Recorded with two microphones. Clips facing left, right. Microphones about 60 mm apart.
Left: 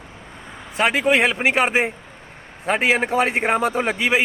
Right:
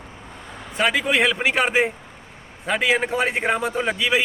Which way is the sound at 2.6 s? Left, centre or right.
Left.